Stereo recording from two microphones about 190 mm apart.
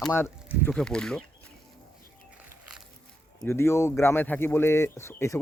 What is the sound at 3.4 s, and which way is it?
Speech, 15° left (ahead or behind).